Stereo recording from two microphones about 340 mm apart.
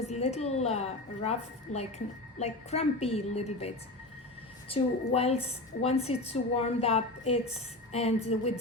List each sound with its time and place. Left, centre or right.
0.1 s a woman's voice: centre
4.7 s a woman's voice: centre